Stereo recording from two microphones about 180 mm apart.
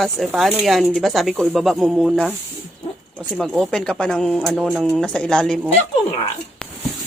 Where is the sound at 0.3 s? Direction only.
Centre (ahead or behind).